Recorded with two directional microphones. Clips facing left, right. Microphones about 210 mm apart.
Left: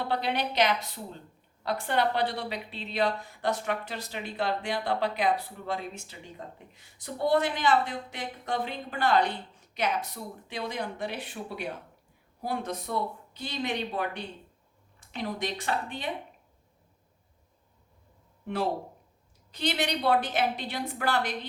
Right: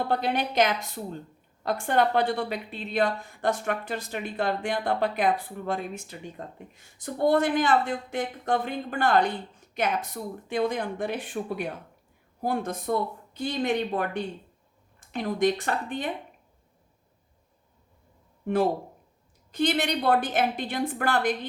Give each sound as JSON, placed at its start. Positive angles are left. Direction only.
{"t": 0.0, "sound": "a woman's voice", "side_deg": -50}
{"t": 19.5, "sound": "a woman's voice", "side_deg": -50}